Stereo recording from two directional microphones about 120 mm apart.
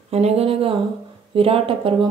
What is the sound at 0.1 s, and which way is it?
Speech, 60° right (ahead or behind).